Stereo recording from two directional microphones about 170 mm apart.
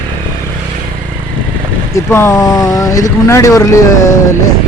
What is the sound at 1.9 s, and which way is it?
Speech, 15° left (ahead or behind).